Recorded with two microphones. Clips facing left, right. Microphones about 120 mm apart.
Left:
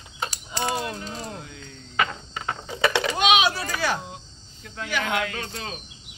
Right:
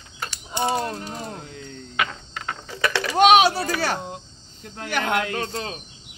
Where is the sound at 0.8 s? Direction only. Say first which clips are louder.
Right 3 dB; 40° right (ahead or behind).